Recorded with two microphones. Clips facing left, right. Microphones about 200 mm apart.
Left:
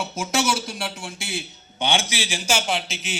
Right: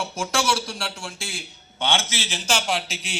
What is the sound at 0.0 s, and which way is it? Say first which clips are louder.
A man's voice: left 1 dB; 20° left (ahead or behind).